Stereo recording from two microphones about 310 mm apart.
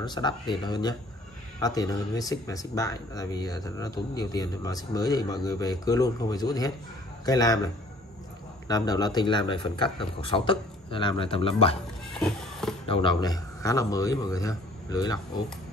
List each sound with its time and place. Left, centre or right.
0.0 s speech: centre
12.2 s a sound: centre
12.8 s speech: centre